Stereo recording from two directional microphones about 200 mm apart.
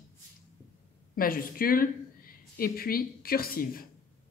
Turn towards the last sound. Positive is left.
turn(degrees=45)  # may be behind; listen again after turning